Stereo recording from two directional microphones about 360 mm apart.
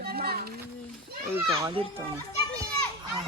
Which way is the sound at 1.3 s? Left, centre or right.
Centre.